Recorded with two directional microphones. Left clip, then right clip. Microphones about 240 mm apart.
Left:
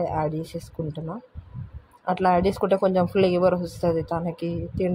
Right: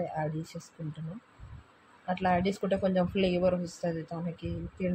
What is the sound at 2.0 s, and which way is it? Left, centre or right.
Speech, left.